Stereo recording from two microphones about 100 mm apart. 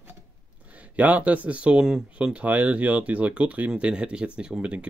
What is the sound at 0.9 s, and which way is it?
Speech, 15° right (ahead or behind).